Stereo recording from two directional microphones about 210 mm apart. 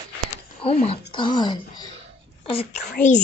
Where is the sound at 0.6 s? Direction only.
30° left (ahead or behind).